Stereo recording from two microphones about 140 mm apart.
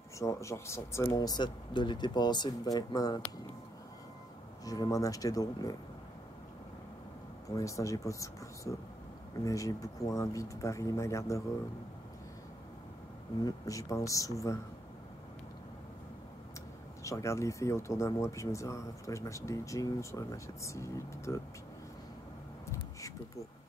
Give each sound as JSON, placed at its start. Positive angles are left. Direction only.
{"t": 0.2, "sound": "speech", "side_deg": 20}
{"t": 4.6, "sound": "speech", "side_deg": 25}
{"t": 7.4, "sound": "speech", "side_deg": 25}
{"t": 13.4, "sound": "speech", "side_deg": 25}
{"t": 17.0, "sound": "speech", "side_deg": 20}
{"t": 22.7, "sound": "a sound", "side_deg": 25}